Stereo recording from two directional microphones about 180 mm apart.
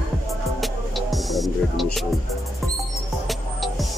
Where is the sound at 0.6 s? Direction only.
Centre (ahead or behind).